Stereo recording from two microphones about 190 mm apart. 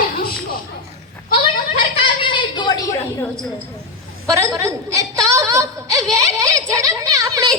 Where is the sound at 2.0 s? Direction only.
25° left (ahead or behind).